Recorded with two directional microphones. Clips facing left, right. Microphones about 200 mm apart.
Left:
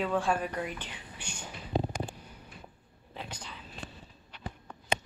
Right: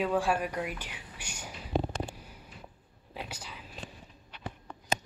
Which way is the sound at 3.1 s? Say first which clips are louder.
Right 1 dB; 5° right (ahead or behind).